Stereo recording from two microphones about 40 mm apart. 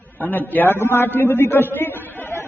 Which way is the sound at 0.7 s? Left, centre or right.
Left.